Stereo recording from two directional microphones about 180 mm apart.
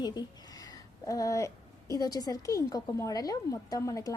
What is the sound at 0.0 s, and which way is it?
A woman's voice, 20° left (ahead or behind).